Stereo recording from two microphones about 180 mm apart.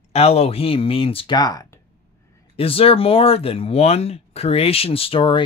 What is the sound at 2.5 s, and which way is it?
Speech, 30° left (ahead or behind).